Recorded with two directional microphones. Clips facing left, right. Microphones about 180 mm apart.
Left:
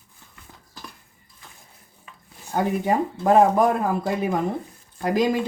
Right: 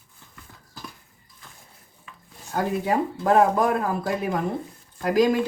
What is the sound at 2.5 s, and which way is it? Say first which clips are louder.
Speech: left 2 dB; 20° left (ahead or behind).